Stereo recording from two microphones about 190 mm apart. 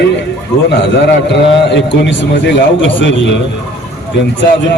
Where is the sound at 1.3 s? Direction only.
65° left (ahead or behind).